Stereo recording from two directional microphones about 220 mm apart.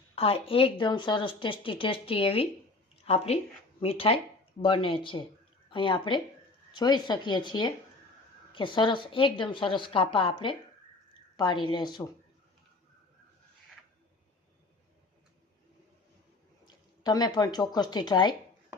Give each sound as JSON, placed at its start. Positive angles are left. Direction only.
{"t": 0.2, "sound": "speech", "side_deg": 25}
{"t": 2.9, "sound": "a sound", "side_deg": 25}
{"t": 3.8, "sound": "speech", "side_deg": 25}
{"t": 16.6, "sound": "speech", "side_deg": 20}